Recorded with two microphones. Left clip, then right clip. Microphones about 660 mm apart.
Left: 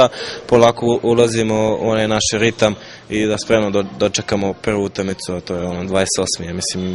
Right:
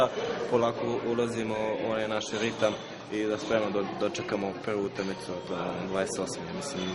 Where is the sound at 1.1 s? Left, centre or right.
Left.